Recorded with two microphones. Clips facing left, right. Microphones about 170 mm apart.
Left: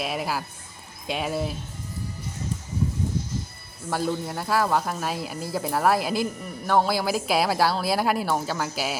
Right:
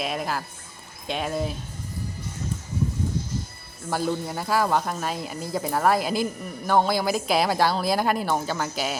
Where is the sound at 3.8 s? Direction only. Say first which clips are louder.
Even; centre (ahead or behind).